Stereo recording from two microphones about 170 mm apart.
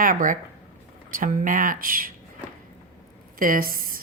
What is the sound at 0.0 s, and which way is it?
Speech, 50° right (ahead or behind).